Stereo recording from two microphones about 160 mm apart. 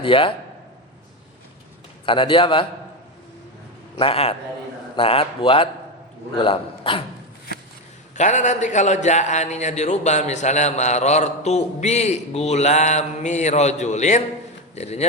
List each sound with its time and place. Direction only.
0.0 s speech: 35° left (ahead or behind)
2.0 s speech: 30° left (ahead or behind)
3.9 s speech: 35° left (ahead or behind)
8.1 s a man's voice: 45° left (ahead or behind)